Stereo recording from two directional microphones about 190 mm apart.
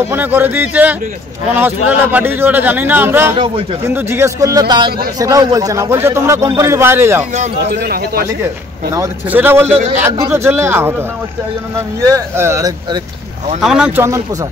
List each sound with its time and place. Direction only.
0.1 s speech: 10° right (ahead or behind)
7.5 s speech: 55° right (ahead or behind)
8.9 s speech: 15° right (ahead or behind)
13.6 s speech: 5° right (ahead or behind)